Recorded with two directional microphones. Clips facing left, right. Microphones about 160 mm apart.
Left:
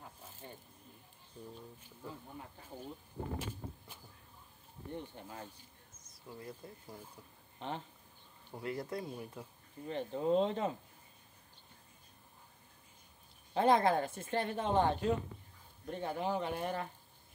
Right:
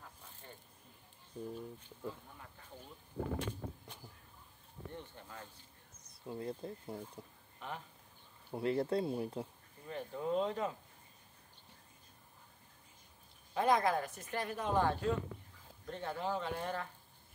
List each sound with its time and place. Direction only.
0.4 s a sound: 20° left (ahead or behind)
1.3 s speech: 15° right (ahead or behind)
3.3 s a sound: 5° left (ahead or behind)
4.9 s speech: 15° left (ahead or behind)
6.2 s speech: 25° right (ahead or behind)
7.5 s speech: 30° left (ahead or behind)
8.5 s speech: 25° right (ahead or behind)
9.8 s speech: 25° left (ahead or behind)
13.6 s speech: 30° left (ahead or behind)